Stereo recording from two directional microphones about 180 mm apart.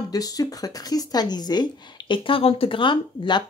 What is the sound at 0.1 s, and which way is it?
Speech, 20° left (ahead or behind).